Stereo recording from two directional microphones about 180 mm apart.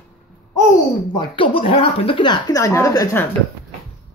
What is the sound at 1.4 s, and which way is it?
Speech, 30° left (ahead or behind).